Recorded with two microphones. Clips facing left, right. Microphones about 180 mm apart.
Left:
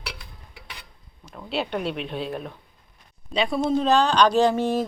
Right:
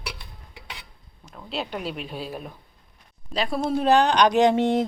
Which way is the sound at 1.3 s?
Centre (ahead or behind).